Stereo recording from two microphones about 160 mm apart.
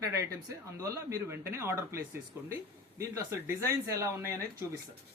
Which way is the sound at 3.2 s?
15° right (ahead or behind).